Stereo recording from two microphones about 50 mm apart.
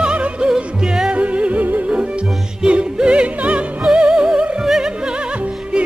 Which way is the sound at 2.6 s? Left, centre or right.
Centre.